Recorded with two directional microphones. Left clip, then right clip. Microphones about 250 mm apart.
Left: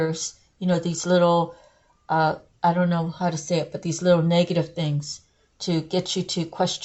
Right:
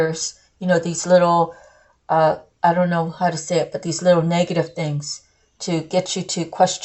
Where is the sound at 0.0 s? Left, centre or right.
Left.